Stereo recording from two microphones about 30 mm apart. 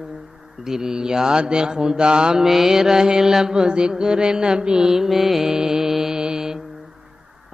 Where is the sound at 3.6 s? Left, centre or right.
Right.